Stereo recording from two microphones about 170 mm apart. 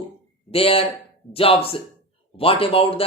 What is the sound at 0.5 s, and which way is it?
Speech, 35° left (ahead or behind).